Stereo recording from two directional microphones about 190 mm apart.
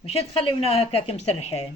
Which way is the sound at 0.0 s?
30° left (ahead or behind).